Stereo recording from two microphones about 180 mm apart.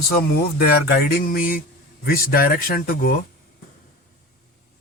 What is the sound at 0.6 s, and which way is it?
Speech, 60° left (ahead or behind).